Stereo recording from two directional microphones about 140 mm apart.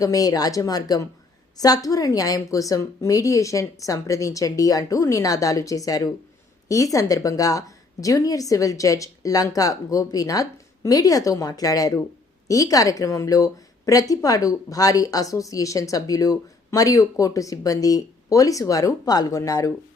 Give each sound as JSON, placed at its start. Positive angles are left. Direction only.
{"t": 0.0, "sound": "a woman's voice", "side_deg": 25}